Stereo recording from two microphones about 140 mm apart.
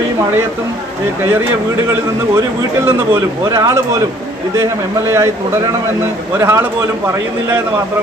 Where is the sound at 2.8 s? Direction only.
20° right (ahead or behind).